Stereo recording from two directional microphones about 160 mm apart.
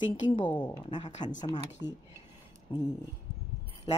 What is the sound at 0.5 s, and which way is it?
Speech, 10° left (ahead or behind).